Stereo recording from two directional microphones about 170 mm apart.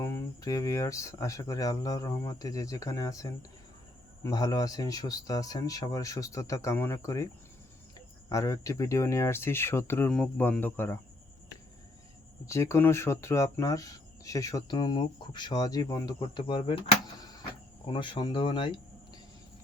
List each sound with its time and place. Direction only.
0.0 s speech: 20° left (ahead or behind)
12.5 s speech: 15° left (ahead or behind)